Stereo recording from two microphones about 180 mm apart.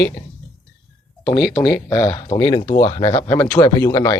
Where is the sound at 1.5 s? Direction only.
15° left (ahead or behind).